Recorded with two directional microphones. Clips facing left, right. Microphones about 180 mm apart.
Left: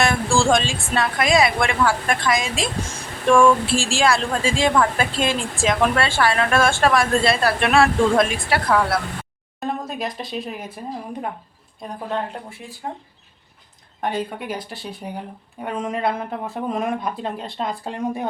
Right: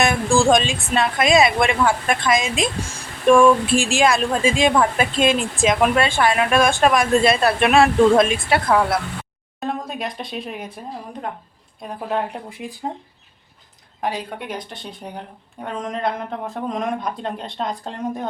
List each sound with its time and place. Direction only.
0.0 s a woman's voice: 20° right (ahead or behind)
9.6 s speech: centre (ahead or behind)
11.8 s speech: centre (ahead or behind)
12.3 s speech: 15° right (ahead or behind)
14.0 s speech: centre (ahead or behind)